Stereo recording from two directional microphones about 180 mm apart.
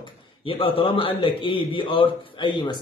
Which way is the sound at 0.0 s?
30° left (ahead or behind).